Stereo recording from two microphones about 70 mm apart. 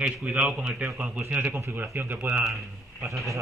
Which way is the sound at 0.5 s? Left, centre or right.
Centre.